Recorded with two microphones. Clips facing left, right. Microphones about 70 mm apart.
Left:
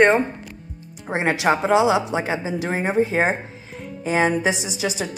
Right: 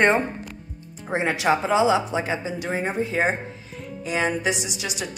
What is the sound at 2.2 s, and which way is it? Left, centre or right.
A woman's voice, left.